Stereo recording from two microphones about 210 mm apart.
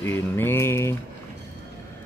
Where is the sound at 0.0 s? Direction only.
10° left (ahead or behind).